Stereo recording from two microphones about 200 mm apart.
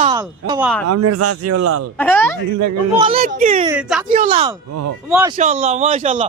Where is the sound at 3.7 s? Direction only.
5° right (ahead or behind).